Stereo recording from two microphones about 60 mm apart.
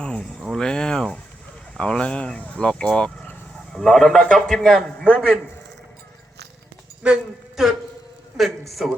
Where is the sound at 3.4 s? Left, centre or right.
Centre.